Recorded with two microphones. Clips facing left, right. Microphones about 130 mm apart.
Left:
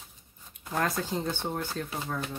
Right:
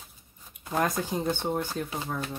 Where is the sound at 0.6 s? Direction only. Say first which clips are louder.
Right 2 dB; 15° right (ahead or behind).